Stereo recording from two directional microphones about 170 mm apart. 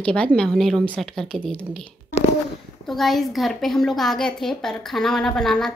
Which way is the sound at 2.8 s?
Centre (ahead or behind).